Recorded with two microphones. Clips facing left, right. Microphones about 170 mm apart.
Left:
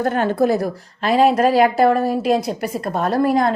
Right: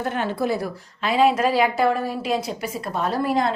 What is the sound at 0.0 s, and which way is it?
A woman's voice, 40° left (ahead or behind).